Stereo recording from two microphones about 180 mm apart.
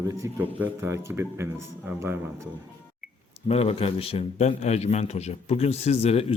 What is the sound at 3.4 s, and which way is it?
A man's voice, 35° left (ahead or behind).